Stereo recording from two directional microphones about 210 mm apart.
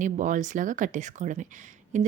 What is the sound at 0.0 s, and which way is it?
A woman's voice, 35° right (ahead or behind).